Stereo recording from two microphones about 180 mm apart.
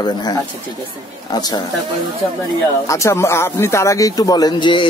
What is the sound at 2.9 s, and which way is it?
Speech, 15° left (ahead or behind).